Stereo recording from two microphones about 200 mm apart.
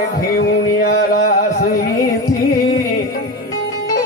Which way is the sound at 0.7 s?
50° left (ahead or behind).